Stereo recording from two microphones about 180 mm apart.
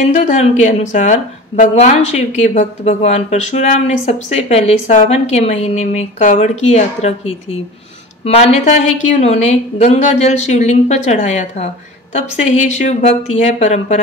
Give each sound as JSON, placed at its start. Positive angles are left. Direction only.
{"t": 0.0, "sound": "a woman's voice", "side_deg": 40}